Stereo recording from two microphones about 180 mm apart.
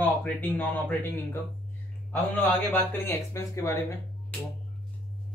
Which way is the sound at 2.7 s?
15° left (ahead or behind).